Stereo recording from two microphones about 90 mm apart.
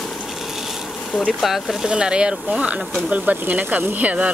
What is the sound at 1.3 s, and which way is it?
Speech, 5° right (ahead or behind).